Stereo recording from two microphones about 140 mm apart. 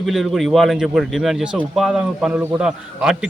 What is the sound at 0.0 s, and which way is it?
Speech, centre (ahead or behind).